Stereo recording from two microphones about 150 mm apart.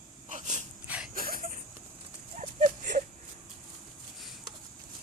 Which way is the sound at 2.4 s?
55° right (ahead or behind).